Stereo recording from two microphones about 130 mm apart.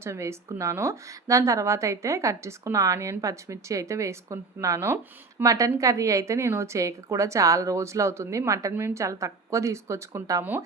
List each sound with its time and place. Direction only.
0.0 s a woman's voice: 20° right (ahead or behind)